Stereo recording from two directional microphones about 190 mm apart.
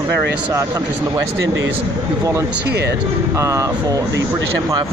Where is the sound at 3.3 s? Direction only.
15° right (ahead or behind).